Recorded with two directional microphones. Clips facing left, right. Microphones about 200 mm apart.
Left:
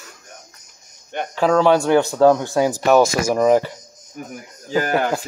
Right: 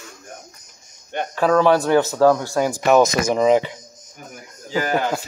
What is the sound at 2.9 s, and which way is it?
Speech, 20° right (ahead or behind).